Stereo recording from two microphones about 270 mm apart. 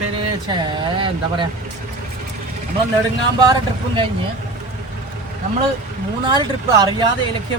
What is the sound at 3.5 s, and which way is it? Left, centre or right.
Speech, centre.